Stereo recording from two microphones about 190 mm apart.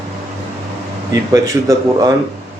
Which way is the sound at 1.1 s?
15° right (ahead or behind).